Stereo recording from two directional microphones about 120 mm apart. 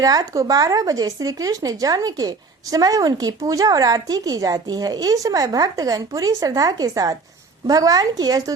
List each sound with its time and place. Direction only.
0.0 s speech: 30° right (ahead or behind)